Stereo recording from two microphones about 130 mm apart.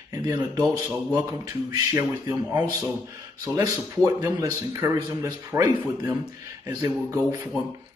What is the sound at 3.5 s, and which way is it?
Speech, 25° right (ahead or behind).